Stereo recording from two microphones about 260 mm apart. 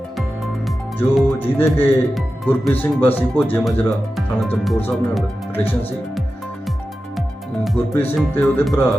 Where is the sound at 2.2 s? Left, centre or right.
Centre.